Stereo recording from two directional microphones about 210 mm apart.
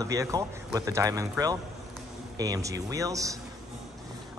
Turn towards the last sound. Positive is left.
turn(degrees=-15)  # may be behind; listen again after turning